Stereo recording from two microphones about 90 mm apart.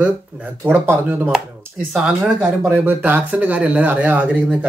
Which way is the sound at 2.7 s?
20° right (ahead or behind).